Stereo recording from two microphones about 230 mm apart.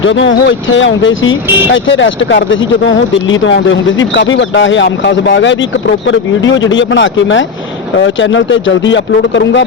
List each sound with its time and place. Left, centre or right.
0.0 s speech: left